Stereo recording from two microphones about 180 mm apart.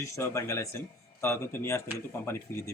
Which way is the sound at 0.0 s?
15° left (ahead or behind).